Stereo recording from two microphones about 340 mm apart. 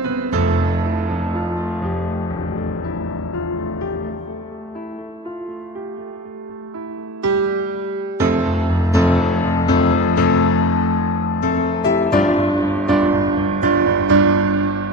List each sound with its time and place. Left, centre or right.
0.0 s music: right
0.8 s music: centre
2.7 s music: left
7.2 s music: right
7.8 s music: centre
9.1 s music: centre
10.0 s music: left
11.9 s music: centre
12.2 s music: centre; by 13.8 s right
13.8 s music: right